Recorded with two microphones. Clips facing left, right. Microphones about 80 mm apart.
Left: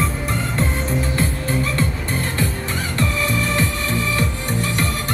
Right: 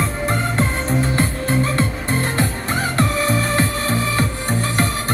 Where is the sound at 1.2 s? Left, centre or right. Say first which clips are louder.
Right 2 dB; right.